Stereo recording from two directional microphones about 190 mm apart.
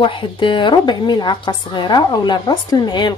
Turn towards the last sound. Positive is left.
turn(degrees=25)  # may be behind; listen again after turning